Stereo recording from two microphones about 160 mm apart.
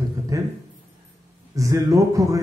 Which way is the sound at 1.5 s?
20° right (ahead or behind).